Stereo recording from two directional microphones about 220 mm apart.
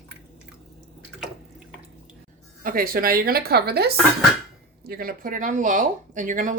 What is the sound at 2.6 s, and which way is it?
A woman's voice, 40° right (ahead or behind).